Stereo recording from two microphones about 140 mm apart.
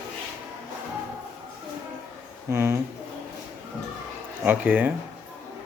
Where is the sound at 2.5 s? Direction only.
20° right (ahead or behind).